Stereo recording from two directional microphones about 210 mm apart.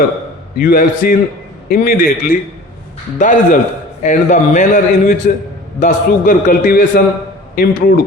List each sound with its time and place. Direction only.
0.5 s a man's voice: 45° left (ahead or behind)